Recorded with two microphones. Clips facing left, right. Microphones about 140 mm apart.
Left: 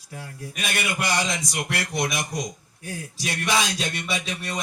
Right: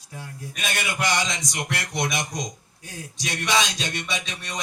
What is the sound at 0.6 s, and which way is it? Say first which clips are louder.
Speech: even; 25° right (ahead or behind).